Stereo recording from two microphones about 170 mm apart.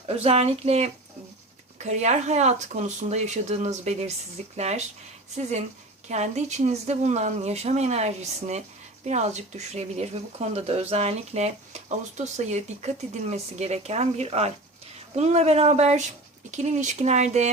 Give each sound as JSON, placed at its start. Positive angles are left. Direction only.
{"t": 0.0, "sound": "speech", "side_deg": -35}
{"t": 6.1, "sound": "speech", "side_deg": -45}